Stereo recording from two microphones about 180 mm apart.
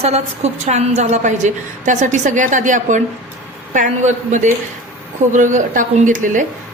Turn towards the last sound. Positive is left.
turn(degrees=-45)  # may be behind; listen again after turning